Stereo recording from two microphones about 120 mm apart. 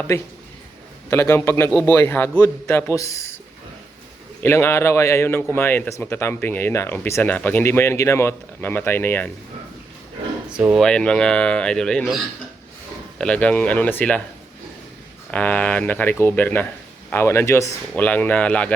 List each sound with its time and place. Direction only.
0.1 s a man's voice: 25° left (ahead or behind)
4.4 s a man's voice: 20° left (ahead or behind)
10.5 s speech: 10° right (ahead or behind)
10.8 s speech: 5° left (ahead or behind)
15.3 s speech: 10° left (ahead or behind)